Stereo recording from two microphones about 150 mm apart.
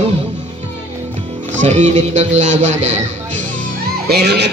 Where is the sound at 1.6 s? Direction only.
50° right (ahead or behind).